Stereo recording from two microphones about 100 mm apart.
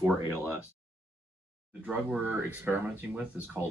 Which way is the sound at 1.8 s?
15° right (ahead or behind).